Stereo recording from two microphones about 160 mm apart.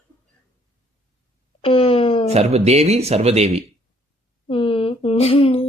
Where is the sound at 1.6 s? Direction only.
35° left (ahead or behind).